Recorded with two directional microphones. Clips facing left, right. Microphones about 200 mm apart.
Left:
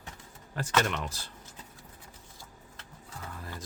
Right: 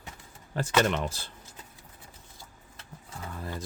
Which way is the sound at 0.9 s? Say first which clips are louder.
Right 5 dB; 25° right (ahead or behind).